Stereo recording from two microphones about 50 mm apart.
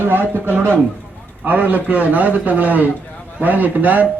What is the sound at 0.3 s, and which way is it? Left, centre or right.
A man's voice, right.